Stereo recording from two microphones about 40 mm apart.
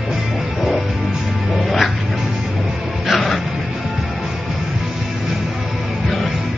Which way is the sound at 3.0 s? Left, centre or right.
Centre.